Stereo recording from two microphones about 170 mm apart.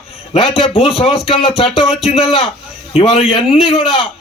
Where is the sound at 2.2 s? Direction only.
30° left (ahead or behind).